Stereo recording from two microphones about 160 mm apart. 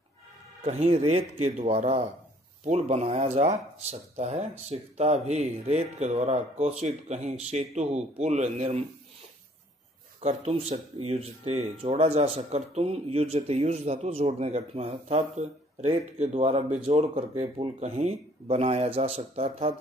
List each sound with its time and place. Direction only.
0.7 s speech: 40° right (ahead or behind)
10.2 s speech: 40° right (ahead or behind)